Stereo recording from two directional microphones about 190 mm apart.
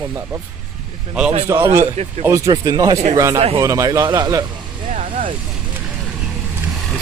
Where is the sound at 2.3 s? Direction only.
20° right (ahead or behind).